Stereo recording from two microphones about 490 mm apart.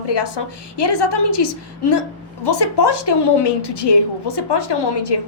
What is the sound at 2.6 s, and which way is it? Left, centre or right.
A woman's voice, left.